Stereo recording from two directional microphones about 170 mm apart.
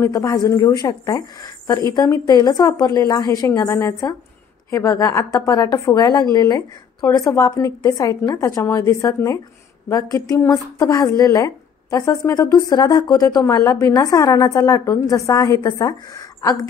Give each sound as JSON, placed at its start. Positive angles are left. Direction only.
{"t": 0.0, "sound": "a woman's voice", "side_deg": 20}